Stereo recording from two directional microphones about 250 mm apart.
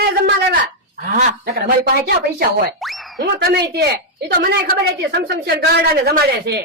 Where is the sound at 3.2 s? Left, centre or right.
Right.